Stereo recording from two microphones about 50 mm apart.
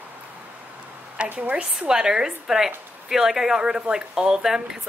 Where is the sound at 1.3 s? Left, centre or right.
Right.